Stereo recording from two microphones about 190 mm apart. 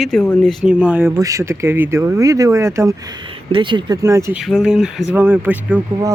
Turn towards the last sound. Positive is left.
turn(degrees=-15)  # may be behind; listen again after turning